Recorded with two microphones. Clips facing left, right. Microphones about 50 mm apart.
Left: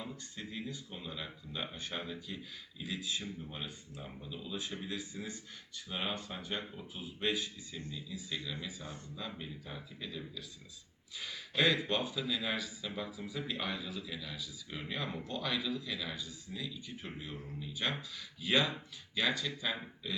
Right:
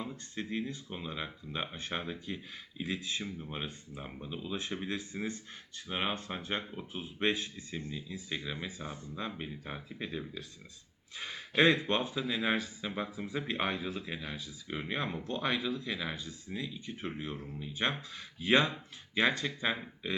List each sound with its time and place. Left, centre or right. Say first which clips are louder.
0.3 s speech: right 7 dB; right